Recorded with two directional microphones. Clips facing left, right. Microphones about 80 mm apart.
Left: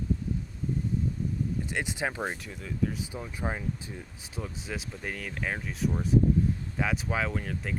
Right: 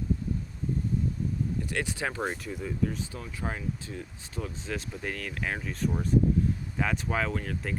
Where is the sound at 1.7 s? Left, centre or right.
Centre.